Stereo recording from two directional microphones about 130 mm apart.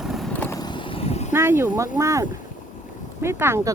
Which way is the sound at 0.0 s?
Centre (ahead or behind).